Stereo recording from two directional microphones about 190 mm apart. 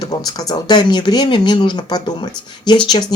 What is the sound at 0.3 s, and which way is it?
Speech, 20° left (ahead or behind).